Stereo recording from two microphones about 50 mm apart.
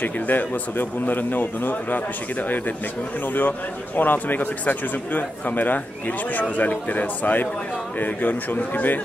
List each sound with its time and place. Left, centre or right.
0.0 s speech: left